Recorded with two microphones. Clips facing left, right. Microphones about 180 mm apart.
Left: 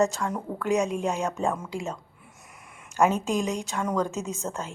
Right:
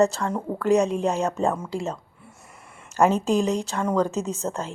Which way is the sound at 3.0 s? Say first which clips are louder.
Right 6 dB; 35° right (ahead or behind).